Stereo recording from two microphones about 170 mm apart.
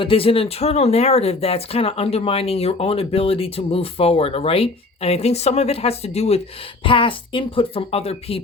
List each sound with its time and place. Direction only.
0.0 s speech: 35° left (ahead or behind)